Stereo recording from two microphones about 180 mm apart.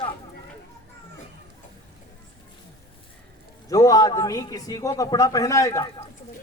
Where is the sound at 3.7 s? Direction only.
20° left (ahead or behind).